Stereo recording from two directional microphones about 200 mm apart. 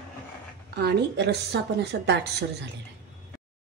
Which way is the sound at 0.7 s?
55° right (ahead or behind).